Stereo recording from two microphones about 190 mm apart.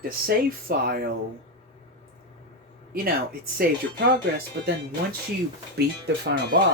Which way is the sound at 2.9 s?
50° right (ahead or behind).